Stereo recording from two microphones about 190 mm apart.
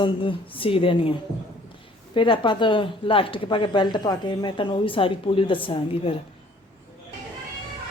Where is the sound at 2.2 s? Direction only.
25° left (ahead or behind).